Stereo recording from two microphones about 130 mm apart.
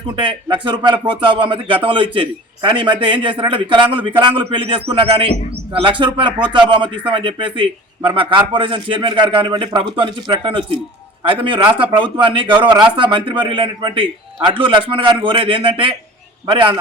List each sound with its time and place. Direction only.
0.2 s speech: 40° right (ahead or behind)